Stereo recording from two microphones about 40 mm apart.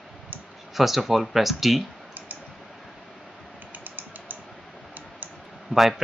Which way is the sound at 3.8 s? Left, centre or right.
Right.